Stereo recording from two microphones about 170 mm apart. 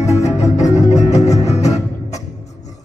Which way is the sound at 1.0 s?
40° left (ahead or behind).